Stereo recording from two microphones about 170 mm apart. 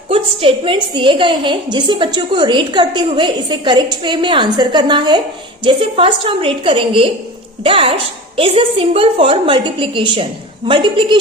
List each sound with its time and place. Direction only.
0.1 s a woman's voice: 30° right (ahead or behind)